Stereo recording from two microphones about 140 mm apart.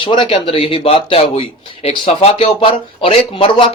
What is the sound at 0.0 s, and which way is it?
A man's voice, 35° left (ahead or behind).